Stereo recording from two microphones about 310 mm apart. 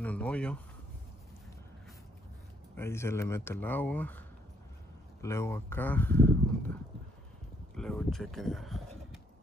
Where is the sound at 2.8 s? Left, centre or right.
Centre.